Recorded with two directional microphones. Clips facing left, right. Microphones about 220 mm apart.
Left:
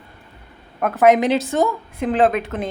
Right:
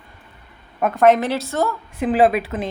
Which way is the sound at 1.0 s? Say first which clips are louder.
Left 1 dB; 15° left (ahead or behind).